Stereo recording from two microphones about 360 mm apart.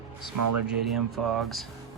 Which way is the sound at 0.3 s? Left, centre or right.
Right.